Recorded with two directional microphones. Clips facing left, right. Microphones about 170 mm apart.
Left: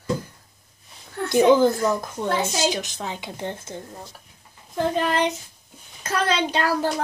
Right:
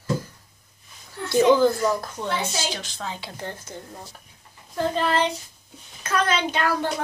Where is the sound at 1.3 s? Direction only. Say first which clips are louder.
Left 1 dB; 15° left (ahead or behind).